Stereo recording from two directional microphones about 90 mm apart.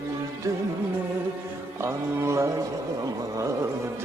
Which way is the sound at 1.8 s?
30° right (ahead or behind).